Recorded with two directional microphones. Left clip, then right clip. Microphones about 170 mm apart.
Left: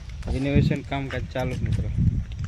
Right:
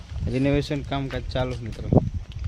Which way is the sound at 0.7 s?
20° right (ahead or behind).